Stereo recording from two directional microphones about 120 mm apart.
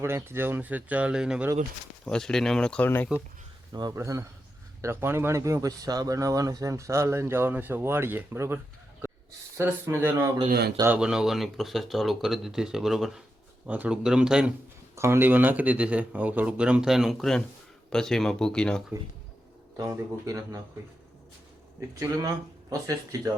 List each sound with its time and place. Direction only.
0.0 s speech: 20° right (ahead or behind)
2.0 s speech: 5° left (ahead or behind)
3.7 s speech: 35° right (ahead or behind)
3.9 s speech: 25° right (ahead or behind)
8.5 s bird: 20° right (ahead or behind)
9.6 s speech: 20° right (ahead or behind)
10.3 s speech: 35° right (ahead or behind)
10.8 s speech: 10° right (ahead or behind)
14.9 s speech: 20° right (ahead or behind); by 18.8 s 5° left (ahead or behind)
19.7 s speech: 30° right (ahead or behind)
21.8 s speech: 30° right (ahead or behind)